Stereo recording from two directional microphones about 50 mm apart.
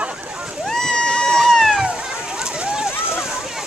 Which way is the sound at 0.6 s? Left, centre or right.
Centre.